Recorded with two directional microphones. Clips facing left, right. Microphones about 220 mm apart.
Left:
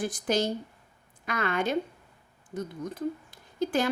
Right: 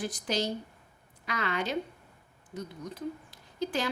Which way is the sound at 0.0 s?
50° left (ahead or behind).